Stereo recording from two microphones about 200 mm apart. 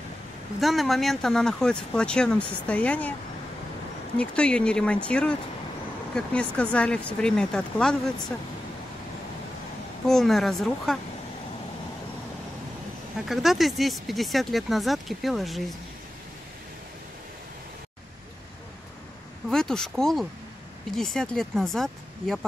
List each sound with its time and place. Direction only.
0.6 s speech: centre (ahead or behind)
4.2 s speech: 5° left (ahead or behind)
10.0 s speech: centre (ahead or behind)
13.2 s speech: centre (ahead or behind)
19.5 s speech: 5° left (ahead or behind)